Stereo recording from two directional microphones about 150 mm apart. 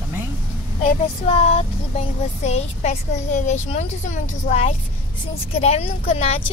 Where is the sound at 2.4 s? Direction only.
50° left (ahead or behind).